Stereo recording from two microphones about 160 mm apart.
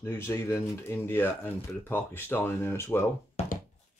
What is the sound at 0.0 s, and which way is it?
Speech, 15° left (ahead or behind).